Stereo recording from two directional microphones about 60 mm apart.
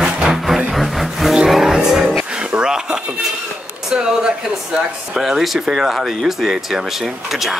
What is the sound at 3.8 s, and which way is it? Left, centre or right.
Speech, centre.